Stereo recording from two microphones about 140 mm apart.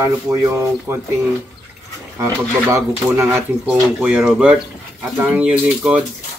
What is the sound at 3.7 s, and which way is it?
A woman's voice, 5° right (ahead or behind).